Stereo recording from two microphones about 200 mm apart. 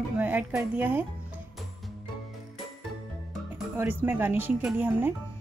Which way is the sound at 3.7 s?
10° right (ahead or behind).